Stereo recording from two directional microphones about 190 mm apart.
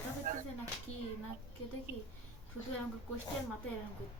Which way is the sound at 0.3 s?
45° right (ahead or behind).